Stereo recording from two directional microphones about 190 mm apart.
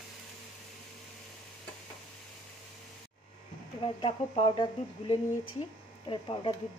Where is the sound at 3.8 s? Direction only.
30° left (ahead or behind).